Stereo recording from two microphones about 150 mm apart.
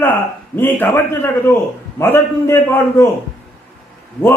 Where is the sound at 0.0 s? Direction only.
15° left (ahead or behind).